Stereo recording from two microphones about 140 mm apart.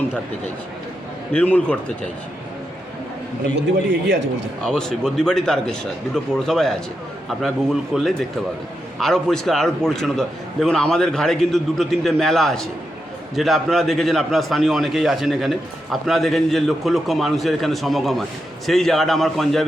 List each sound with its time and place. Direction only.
1.3 s a man's voice: 10° left (ahead or behind)
4.6 s a man's voice: 5° left (ahead or behind)